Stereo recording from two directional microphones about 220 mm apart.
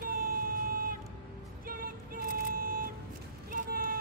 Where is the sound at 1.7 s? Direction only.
40° right (ahead or behind).